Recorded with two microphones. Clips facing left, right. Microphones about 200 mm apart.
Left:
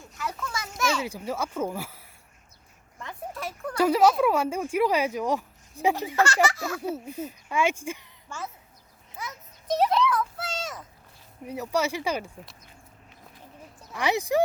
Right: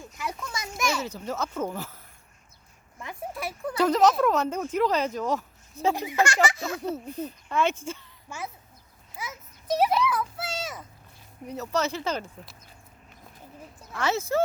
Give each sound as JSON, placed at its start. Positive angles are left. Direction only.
{"t": 0.7, "sound": "children playing", "side_deg": -10}
{"t": 1.0, "sound": "speech", "side_deg": 10}
{"t": 3.0, "sound": "speech", "side_deg": -10}
{"t": 3.8, "sound": "speech", "side_deg": 10}
{"t": 6.0, "sound": "speech", "side_deg": -15}
{"t": 6.8, "sound": "speech", "side_deg": 10}
{"t": 9.1, "sound": "a sound", "side_deg": -5}
{"t": 11.4, "sound": "speech", "side_deg": 10}
{"t": 13.9, "sound": "speech", "side_deg": 15}